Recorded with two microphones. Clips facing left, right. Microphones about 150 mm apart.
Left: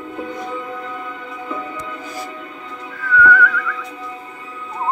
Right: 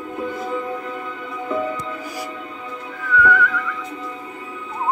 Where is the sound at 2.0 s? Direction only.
10° right (ahead or behind).